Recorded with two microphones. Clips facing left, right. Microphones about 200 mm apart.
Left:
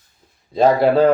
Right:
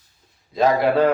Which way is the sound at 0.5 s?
30° left (ahead or behind).